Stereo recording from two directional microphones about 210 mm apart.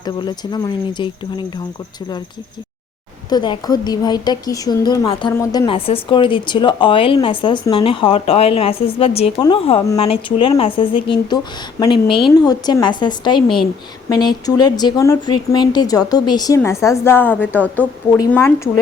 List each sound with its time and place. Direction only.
0.0 s speech: 20° left (ahead or behind)
3.2 s speech: 20° left (ahead or behind)